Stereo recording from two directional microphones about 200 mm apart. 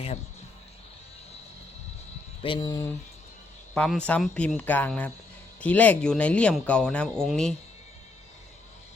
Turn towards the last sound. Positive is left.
turn(degrees=0)  # may be behind; listen again after turning